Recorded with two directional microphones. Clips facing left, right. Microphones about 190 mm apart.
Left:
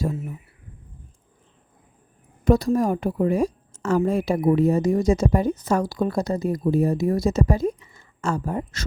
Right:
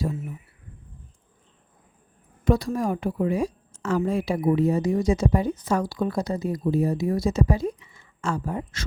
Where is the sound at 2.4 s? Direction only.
45° left (ahead or behind).